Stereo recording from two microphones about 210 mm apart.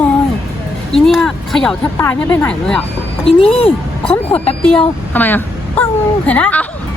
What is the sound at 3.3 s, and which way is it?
Speech, 25° left (ahead or behind).